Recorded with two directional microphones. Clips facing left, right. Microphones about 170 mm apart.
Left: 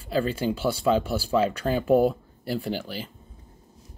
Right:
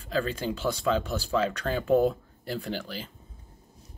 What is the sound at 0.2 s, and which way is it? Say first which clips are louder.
Speech: left 4 dB; 10° left (ahead or behind).